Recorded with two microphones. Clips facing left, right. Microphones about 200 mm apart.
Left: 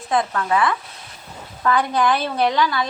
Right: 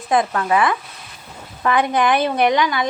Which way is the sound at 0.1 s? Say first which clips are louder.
Right 3 dB; 15° right (ahead or behind).